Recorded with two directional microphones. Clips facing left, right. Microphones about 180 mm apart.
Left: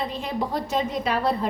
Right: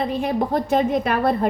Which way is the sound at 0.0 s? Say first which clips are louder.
Right 6 dB; 55° right (ahead or behind).